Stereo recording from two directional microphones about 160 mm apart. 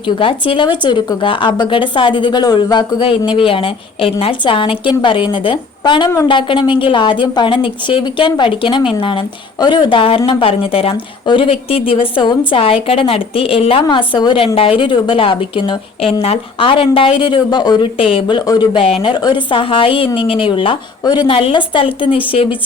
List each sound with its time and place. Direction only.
0.2 s a woman's voice: 30° left (ahead or behind)